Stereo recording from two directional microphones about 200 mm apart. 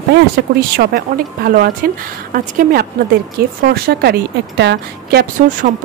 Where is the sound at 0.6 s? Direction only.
50° right (ahead or behind).